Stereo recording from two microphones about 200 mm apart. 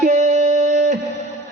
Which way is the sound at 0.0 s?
35° right (ahead or behind).